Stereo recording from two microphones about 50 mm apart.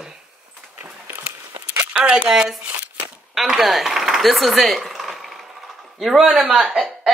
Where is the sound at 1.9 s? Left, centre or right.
Centre.